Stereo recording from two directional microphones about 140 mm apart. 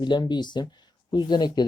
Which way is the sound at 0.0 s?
30° left (ahead or behind).